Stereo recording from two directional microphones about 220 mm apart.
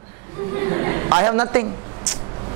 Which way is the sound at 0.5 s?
20° right (ahead or behind).